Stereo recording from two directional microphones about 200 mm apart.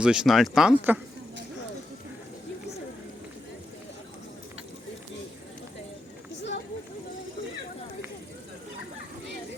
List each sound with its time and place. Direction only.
0.0 s speech: 5° right (ahead or behind)